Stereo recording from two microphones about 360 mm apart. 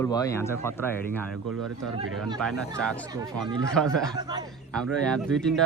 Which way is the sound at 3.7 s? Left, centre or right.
Centre.